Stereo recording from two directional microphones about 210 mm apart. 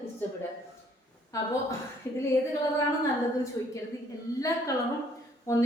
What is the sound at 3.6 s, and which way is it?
Speech, 15° left (ahead or behind).